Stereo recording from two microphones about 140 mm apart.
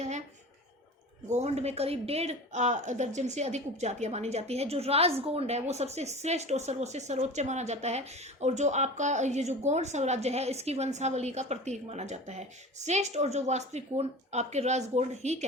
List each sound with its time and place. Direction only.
1.3 s speech: 50° right (ahead or behind)